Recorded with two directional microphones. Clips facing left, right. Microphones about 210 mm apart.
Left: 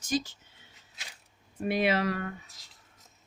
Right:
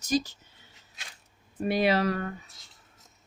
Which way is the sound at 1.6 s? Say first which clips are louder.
Right 2 dB; 40° right (ahead or behind).